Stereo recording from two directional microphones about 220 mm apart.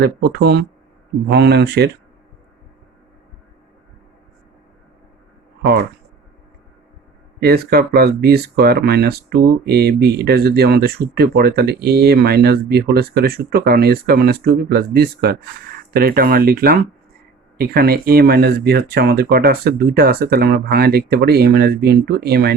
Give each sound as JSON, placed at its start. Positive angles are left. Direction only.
{"t": 0.0, "sound": "speech", "side_deg": -50}
{"t": 7.3, "sound": "speech", "side_deg": -45}